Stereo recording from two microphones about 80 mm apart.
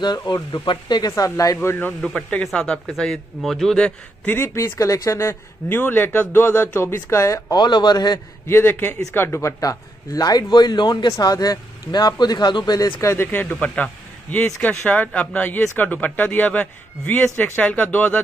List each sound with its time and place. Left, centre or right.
0.0 s a man's voice: left
1.1 s speech: left
1.6 s a man's voice: left
2.0 s a man's voice: centre
4.3 s a man's voice: left
7.5 s a man's voice: left
8.5 s a man's voice: left
9.6 s a man's voice: left
11.1 s a man's voice: left
13.0 s a man's voice: left
13.4 s a man's voice: centre